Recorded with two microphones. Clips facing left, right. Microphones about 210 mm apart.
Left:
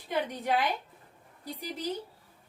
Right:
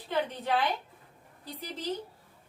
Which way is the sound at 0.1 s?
15° left (ahead or behind).